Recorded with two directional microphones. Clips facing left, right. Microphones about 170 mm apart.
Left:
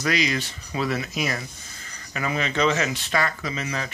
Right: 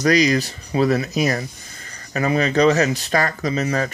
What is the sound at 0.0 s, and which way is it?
Speech, 40° right (ahead or behind).